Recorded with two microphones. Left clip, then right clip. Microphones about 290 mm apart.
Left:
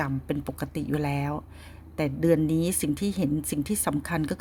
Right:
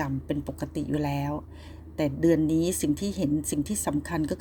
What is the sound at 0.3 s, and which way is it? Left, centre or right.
Speech, left.